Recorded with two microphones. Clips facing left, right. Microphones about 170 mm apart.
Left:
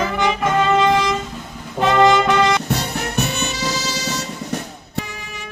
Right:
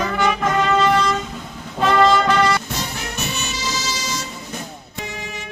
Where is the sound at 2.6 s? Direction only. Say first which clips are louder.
Left 5 dB; 60° left (ahead or behind).